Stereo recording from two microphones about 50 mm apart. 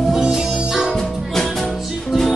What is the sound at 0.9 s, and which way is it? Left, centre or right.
Music, centre.